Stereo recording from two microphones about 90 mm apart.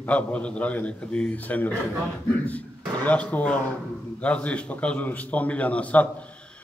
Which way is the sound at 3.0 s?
15° left (ahead or behind).